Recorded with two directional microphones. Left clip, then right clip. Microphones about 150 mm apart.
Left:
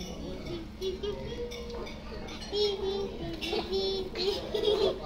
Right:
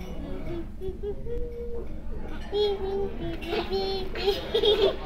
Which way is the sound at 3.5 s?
20° right (ahead or behind).